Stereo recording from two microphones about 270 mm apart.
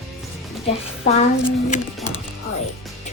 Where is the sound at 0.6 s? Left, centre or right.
Left.